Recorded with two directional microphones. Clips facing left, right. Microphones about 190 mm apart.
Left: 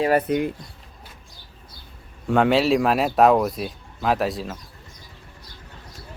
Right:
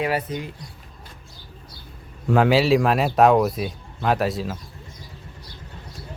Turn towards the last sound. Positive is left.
turn(degrees=0)  # may be behind; listen again after turning